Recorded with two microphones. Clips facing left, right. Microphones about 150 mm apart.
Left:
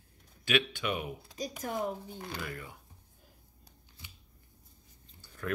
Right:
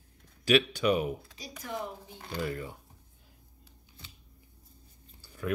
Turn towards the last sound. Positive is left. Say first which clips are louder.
# right 3 dB
turn(degrees=-10)  # may be behind; listen again after turning